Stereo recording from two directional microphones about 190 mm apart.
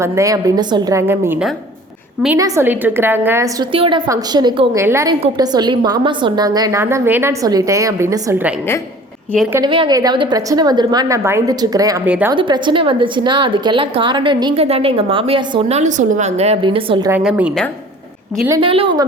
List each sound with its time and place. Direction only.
0.0 s a woman's voice: 15° right (ahead or behind)
9.6 s a woman's voice: 25° right (ahead or behind)
12.0 s a woman's voice: 10° right (ahead or behind)
12.3 s a woman's voice: 25° right (ahead or behind)
15.8 s speech: 40° right (ahead or behind)
17.1 s a woman's voice: 10° right (ahead or behind)
18.6 s a woman's voice: 30° right (ahead or behind)